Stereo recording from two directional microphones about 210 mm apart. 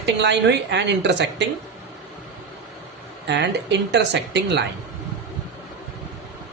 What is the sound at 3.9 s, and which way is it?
Speech, 55° right (ahead or behind).